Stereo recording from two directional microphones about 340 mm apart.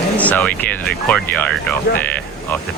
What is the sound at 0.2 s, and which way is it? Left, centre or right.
Speech, centre.